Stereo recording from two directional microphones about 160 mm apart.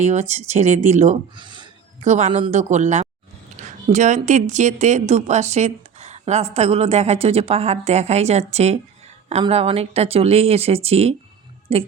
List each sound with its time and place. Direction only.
0.0 s speech: 45° right (ahead or behind)
1.4 s a sound: 30° right (ahead or behind)
2.0 s speech: 45° right (ahead or behind)